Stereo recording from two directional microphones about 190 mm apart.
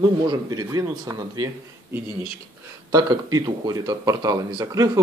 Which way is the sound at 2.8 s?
20° right (ahead or behind).